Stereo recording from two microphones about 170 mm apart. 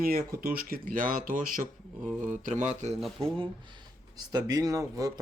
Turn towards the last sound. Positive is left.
turn(degrees=-20)  # may be behind; listen again after turning